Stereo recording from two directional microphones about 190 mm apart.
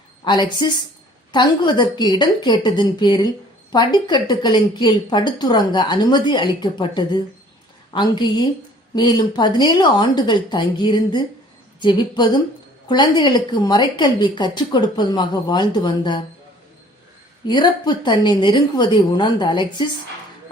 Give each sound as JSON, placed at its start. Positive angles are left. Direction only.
{"t": 0.3, "sound": "a woman's voice", "side_deg": 25}
{"t": 17.4, "sound": "a woman's voice", "side_deg": 25}